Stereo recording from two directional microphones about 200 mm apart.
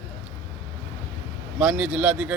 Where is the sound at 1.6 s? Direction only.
5° right (ahead or behind).